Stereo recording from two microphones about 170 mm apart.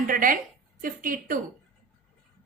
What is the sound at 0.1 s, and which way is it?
A woman's voice, 55° right (ahead or behind).